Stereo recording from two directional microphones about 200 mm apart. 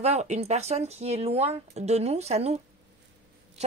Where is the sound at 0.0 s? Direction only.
35° right (ahead or behind).